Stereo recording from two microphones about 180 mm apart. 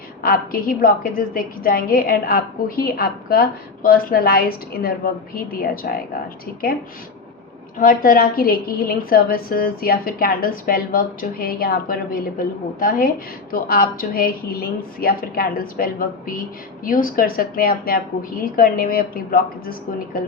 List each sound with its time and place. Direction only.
0.2 s a woman's voice: 55° left (ahead or behind)
7.8 s a woman's voice: 50° left (ahead or behind)